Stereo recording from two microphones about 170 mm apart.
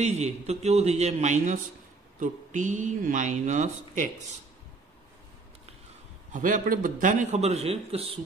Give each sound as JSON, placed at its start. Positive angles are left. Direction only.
{"t": 0.0, "sound": "a man's voice", "side_deg": -40}
{"t": 6.3, "sound": "speech", "side_deg": -50}